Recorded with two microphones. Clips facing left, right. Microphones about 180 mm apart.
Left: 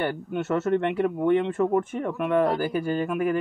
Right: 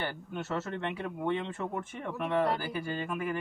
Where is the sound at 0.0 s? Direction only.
60° left (ahead or behind).